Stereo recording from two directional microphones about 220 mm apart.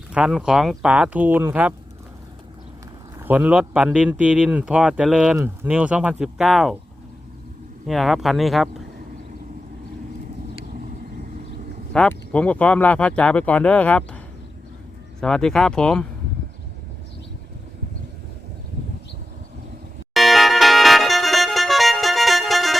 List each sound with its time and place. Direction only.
0.1 s speech: 5° right (ahead or behind)
3.2 s speech: 5° right (ahead or behind)
7.9 s speech: centre (ahead or behind)
11.9 s speech: 5° left (ahead or behind)
15.2 s speech: 5° left (ahead or behind)
20.1 s music: centre (ahead or behind)